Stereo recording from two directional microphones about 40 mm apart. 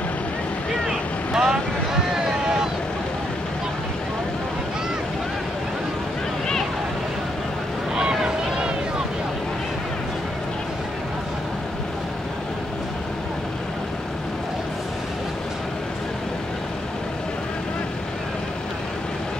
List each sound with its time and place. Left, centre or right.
0.8 s boat: centre
7.9 s boat: centre